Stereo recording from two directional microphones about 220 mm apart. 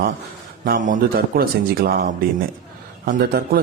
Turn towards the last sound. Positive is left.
turn(degrees=-40)  # may be behind; listen again after turning